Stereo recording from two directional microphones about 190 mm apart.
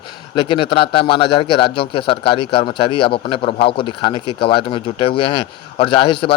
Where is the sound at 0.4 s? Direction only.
25° left (ahead or behind).